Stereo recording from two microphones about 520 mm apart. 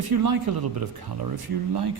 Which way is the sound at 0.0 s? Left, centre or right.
Right.